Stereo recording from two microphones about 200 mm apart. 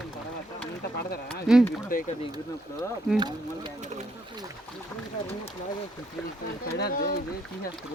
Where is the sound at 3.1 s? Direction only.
20° right (ahead or behind).